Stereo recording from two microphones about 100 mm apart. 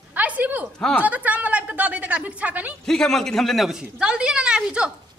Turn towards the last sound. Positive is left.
turn(degrees=-10)  # may be behind; listen again after turning